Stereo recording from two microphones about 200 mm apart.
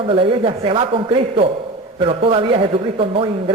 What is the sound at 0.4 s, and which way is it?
Speech, 25° right (ahead or behind).